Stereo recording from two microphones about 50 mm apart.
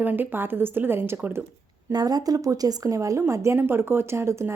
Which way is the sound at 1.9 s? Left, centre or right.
Right.